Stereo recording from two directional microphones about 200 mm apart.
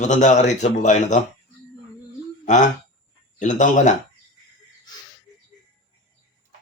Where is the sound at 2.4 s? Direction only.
40° left (ahead or behind).